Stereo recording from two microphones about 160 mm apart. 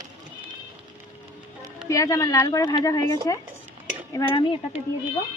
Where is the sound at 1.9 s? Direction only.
20° left (ahead or behind).